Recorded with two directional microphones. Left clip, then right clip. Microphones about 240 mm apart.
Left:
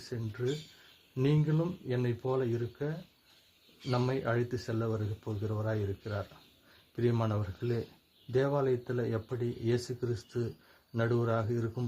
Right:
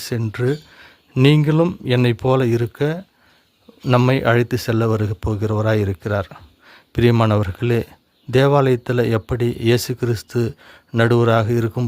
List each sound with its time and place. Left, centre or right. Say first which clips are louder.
0.1 s speech: right 14 dB; right